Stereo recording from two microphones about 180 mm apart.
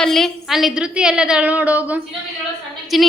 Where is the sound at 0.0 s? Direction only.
Centre (ahead or behind).